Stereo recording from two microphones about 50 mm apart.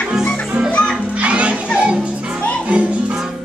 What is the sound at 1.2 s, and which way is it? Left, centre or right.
Music, right.